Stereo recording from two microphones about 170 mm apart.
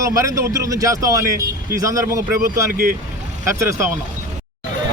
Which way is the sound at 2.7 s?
55° right (ahead or behind).